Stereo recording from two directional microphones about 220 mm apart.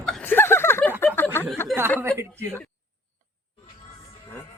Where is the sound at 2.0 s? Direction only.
10° right (ahead or behind).